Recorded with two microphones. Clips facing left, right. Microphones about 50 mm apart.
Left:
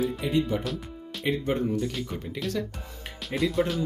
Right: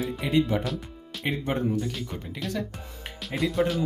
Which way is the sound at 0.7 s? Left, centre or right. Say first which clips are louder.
Even; centre.